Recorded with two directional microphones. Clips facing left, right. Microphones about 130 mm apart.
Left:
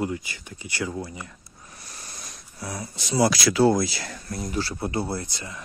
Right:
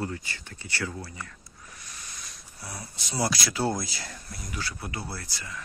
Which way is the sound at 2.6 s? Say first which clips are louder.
Left 7 dB; 90° left.